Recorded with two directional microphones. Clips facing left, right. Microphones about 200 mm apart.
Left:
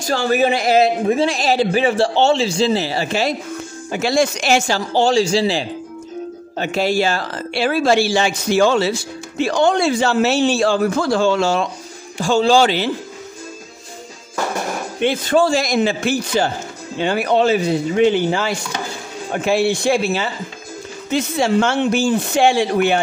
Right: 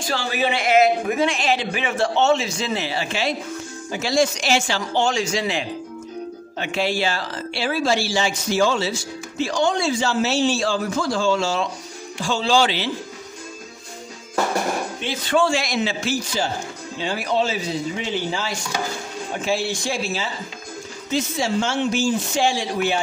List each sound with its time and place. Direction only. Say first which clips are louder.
0.0 s speech: left 7 dB; 45° left (ahead or behind)
3.9 s speech: left 3 dB; 60° left (ahead or behind)
12.2 s a man's voice: left 6 dB; 45° left (ahead or behind)
15.0 s speech: left 10 dB; 60° left (ahead or behind)
15.3 s a man's voice: left 3 dB; 40° left (ahead or behind); by 22.9 s 60° left (ahead or behind)